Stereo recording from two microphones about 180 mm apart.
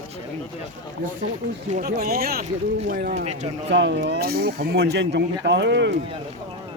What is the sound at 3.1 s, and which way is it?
Speech, 40° right (ahead or behind).